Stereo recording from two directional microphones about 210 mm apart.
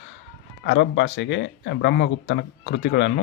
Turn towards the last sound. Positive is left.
turn(degrees=55)  # may be behind; listen again after turning